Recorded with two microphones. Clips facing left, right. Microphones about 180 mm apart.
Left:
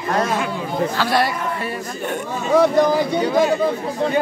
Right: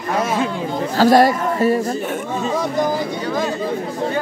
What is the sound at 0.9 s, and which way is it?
Speech, 45° right (ahead or behind).